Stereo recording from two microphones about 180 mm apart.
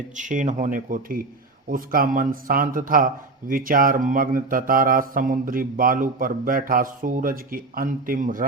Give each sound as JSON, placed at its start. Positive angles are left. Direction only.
{"t": 0.2, "sound": "mantra", "side_deg": -45}